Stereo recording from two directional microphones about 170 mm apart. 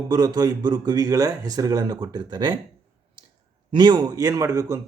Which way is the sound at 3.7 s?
25° right (ahead or behind).